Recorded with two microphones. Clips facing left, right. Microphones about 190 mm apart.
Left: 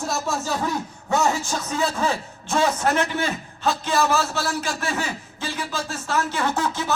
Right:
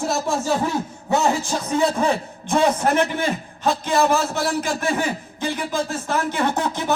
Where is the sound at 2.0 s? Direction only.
15° right (ahead or behind).